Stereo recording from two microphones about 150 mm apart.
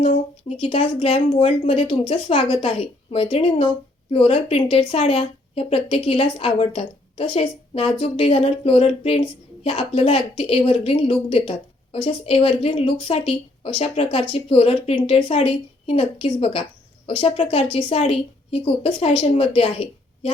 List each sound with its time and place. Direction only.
0.0 s a woman's voice: 40° left (ahead or behind)